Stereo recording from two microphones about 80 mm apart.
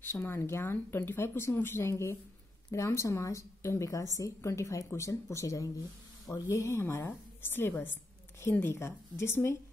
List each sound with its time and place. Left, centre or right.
0.0 s a woman's voice: left